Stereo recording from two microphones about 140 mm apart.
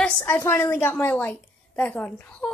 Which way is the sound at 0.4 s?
15° left (ahead or behind).